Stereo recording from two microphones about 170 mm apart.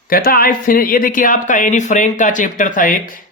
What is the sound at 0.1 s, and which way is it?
Speech, 60° left (ahead or behind).